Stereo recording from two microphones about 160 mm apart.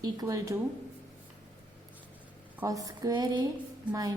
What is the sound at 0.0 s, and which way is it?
Speech, 20° right (ahead or behind).